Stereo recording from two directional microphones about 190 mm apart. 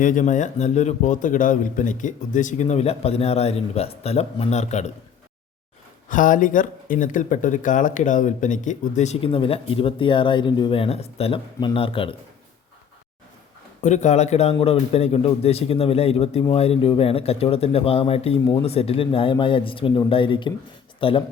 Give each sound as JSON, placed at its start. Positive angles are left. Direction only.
{"t": 0.0, "sound": "speech", "side_deg": 45}
{"t": 6.1, "sound": "speech", "side_deg": 45}
{"t": 13.8, "sound": "speech", "side_deg": 40}